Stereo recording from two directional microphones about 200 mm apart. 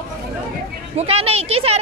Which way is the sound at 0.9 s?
30° right (ahead or behind).